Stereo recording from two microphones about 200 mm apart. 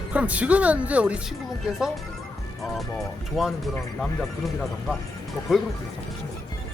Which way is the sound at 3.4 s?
Centre (ahead or behind).